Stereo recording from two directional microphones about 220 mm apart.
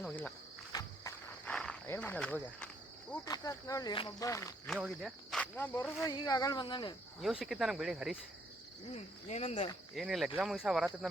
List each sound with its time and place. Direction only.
0.0 s cricket: 5° left (ahead or behind)
0.7 s walk: 15° left (ahead or behind)
1.5 s speech: 5° left (ahead or behind)
3.2 s speech: 15° left (ahead or behind)
4.6 s speech: centre (ahead or behind); by 6.9 s 20° left (ahead or behind)
7.2 s speech: centre (ahead or behind)
9.3 s cricket: 30° left (ahead or behind)
9.9 s speech: centre (ahead or behind)